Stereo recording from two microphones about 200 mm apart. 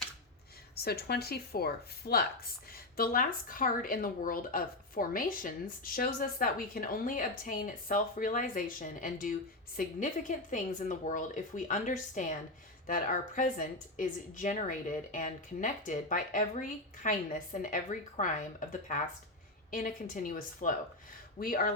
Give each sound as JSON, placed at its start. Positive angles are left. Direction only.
{"t": 0.9, "sound": "speech", "side_deg": 50}